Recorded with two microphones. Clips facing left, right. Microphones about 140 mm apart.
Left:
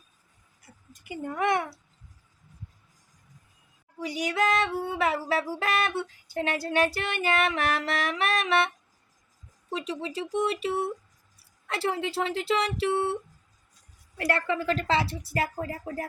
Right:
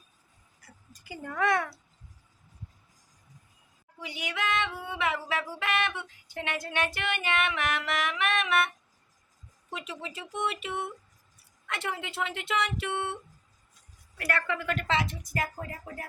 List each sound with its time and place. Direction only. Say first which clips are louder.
0.6 s speech: left 2 dB; 20° left (ahead or behind)
4.0 s music: left 7 dB; 40° left (ahead or behind)
14.3 s music: left 4 dB; 30° left (ahead or behind)